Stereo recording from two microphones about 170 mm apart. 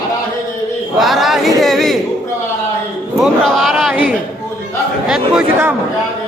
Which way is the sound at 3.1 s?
Centre (ahead or behind).